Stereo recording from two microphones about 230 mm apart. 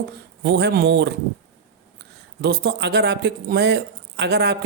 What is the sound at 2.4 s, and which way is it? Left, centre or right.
A man's voice, right.